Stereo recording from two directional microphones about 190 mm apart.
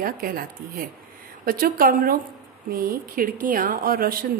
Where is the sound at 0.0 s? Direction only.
50° right (ahead or behind).